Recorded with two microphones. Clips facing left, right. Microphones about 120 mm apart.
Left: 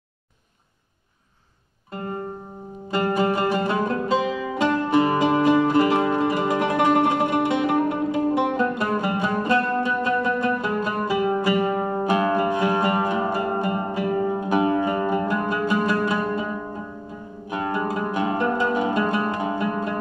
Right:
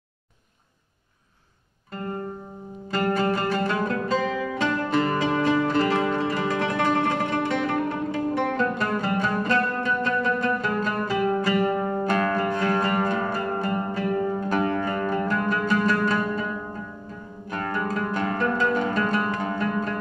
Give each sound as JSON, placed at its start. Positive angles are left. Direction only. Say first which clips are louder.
{"t": 2.9, "sound": "music", "louder": "left 2 dB", "side_deg": 15}
{"t": 17.5, "sound": "zither", "louder": "left 3 dB", "side_deg": 15}